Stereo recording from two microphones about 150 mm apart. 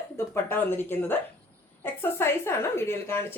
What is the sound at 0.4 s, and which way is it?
A woman's voice, 15° left (ahead or behind).